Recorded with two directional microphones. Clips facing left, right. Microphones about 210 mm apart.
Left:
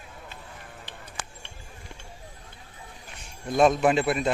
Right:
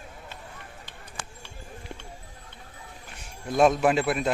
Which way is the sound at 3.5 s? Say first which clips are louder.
Even; 5° right (ahead or behind).